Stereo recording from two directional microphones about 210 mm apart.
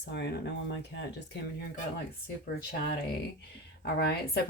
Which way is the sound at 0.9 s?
55° left (ahead or behind).